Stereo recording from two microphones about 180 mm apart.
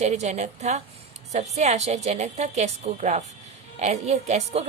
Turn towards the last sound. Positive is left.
turn(degrees=-40)  # may be behind; listen again after turning